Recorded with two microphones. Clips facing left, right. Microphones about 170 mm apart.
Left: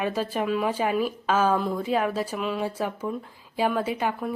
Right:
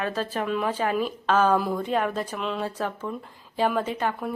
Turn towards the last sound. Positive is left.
turn(degrees=10)  # may be behind; listen again after turning